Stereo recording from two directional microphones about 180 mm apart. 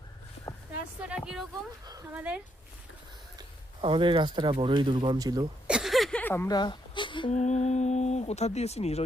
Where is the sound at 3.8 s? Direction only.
30° right (ahead or behind).